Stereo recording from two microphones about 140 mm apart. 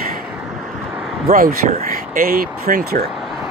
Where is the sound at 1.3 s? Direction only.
80° right.